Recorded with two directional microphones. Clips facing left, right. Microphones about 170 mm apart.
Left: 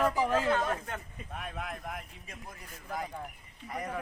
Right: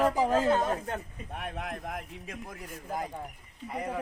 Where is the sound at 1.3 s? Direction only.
60° right (ahead or behind).